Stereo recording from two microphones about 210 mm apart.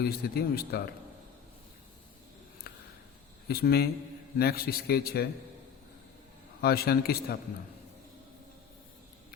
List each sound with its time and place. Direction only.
0.0 s a man's voice: 45° left (ahead or behind)
2.7 s a sound: 45° left (ahead or behind)
3.5 s a man's voice: 50° left (ahead or behind)
6.6 s a man's voice: 50° left (ahead or behind)